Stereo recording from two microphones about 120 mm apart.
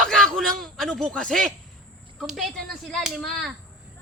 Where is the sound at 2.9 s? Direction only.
Centre (ahead or behind).